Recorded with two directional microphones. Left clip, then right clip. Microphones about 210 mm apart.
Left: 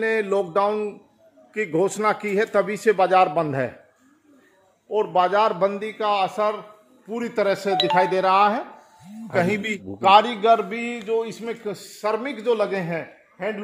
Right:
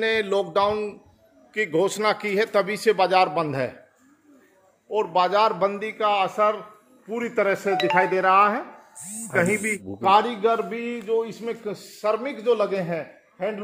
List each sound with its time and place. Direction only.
0.0 s a man's voice: 60° left (ahead or behind)
0.6 s speech: 35° left (ahead or behind)
1.7 s a man's voice: 60° left (ahead or behind)
2.5 s speech: 35° left (ahead or behind)
4.9 s speech: 40° left (ahead or behind)
5.9 s a man's voice: 65° left (ahead or behind)